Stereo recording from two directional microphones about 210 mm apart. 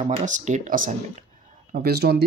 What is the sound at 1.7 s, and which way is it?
Speech, 50° right (ahead or behind).